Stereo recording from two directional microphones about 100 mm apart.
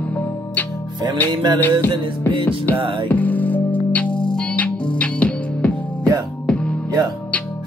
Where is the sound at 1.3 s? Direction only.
45° right (ahead or behind).